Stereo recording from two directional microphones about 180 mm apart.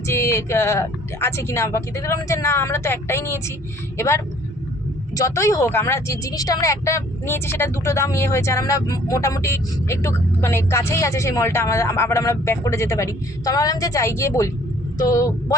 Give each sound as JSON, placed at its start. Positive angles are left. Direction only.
{"t": 0.1, "sound": "a woman's voice", "side_deg": 15}